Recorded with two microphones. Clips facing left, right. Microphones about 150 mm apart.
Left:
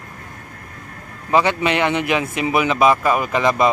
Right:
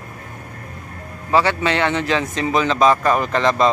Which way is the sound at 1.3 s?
15° left (ahead or behind).